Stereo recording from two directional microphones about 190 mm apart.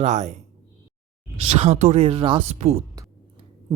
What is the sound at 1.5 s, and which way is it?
Speech, 35° right (ahead or behind).